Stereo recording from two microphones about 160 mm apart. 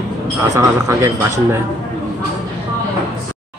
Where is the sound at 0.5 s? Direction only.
15° right (ahead or behind).